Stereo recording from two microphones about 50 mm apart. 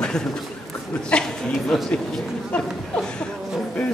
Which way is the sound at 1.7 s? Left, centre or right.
Centre.